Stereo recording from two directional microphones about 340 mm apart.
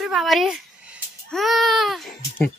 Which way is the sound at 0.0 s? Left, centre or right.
Centre.